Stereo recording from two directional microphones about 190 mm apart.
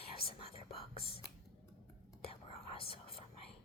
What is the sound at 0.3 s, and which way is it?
Whispering, 30° left (ahead or behind).